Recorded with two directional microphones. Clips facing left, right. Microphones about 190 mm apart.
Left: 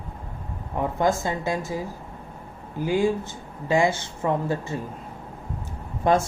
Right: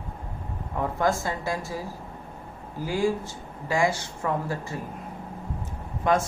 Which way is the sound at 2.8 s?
20° left (ahead or behind).